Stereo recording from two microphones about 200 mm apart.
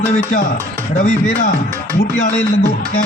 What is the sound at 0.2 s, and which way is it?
Speech, 40° left (ahead or behind).